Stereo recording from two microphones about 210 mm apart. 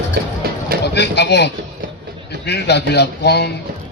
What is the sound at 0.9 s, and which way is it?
Speech, 55° left (ahead or behind).